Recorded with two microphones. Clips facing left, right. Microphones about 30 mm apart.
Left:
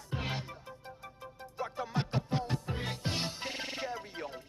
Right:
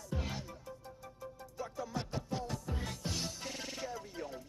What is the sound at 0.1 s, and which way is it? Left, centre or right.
Music, left.